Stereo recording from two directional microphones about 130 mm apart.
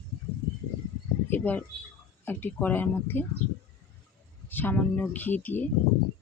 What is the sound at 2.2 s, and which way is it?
Speech, 15° left (ahead or behind).